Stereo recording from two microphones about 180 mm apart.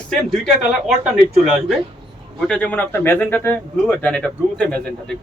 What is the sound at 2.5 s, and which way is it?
Speech, 5° left (ahead or behind).